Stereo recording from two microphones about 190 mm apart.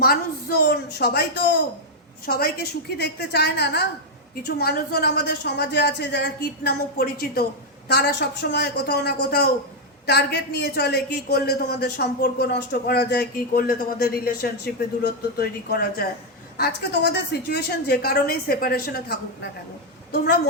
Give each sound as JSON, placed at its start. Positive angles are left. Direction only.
{"t": 0.0, "sound": "a woman's voice", "side_deg": 55}